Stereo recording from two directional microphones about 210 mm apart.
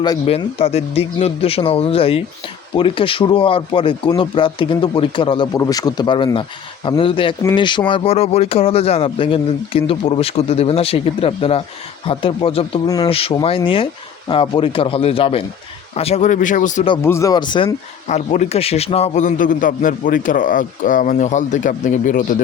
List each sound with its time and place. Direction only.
0.0 s a man's voice: 25° left (ahead or behind)
17.0 s speech: 15° left (ahead or behind)
18.1 s a man's voice: 35° left (ahead or behind)